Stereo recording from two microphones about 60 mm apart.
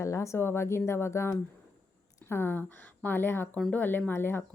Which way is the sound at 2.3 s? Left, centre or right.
Left.